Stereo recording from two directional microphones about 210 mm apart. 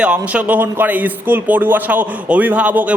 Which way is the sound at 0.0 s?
5° right (ahead or behind).